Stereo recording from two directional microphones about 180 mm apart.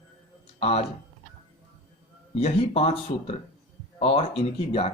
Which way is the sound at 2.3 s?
35° left (ahead or behind).